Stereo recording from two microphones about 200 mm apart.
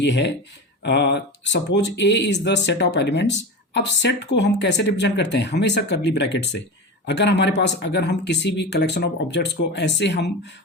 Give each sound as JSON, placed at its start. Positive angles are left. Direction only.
{"t": 0.0, "sound": "speech", "side_deg": 60}